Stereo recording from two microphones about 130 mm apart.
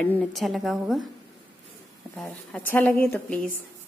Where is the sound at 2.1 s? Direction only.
Centre (ahead or behind).